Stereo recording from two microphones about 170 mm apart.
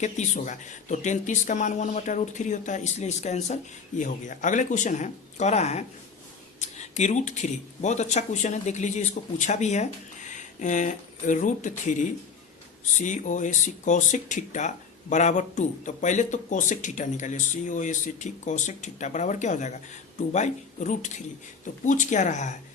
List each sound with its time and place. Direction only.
0.0 s speech: 45° left (ahead or behind)